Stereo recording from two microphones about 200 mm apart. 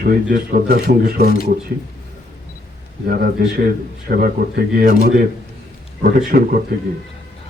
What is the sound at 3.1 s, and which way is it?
Speech, 50° right (ahead or behind).